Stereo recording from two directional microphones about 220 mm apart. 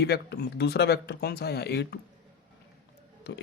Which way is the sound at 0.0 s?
45° left (ahead or behind).